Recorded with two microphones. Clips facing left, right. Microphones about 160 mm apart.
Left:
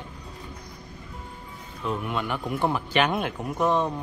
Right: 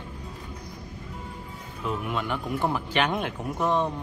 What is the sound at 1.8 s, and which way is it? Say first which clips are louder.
Speech: left 1 dB; 5° right (ahead or behind).